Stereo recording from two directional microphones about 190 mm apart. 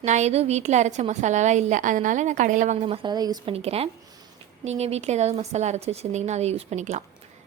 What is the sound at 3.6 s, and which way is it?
A woman's voice, 30° right (ahead or behind).